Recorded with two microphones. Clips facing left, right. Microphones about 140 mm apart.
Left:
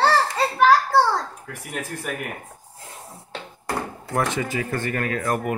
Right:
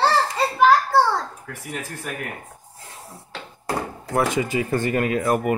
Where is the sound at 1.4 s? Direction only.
Centre (ahead or behind).